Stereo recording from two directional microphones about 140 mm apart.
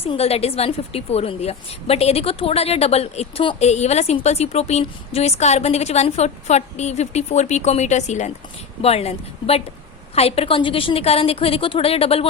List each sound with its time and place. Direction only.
0.0 s a woman's voice: 45° left (ahead or behind)